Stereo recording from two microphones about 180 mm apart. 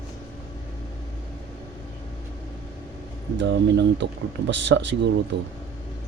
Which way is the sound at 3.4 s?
75° right (ahead or behind).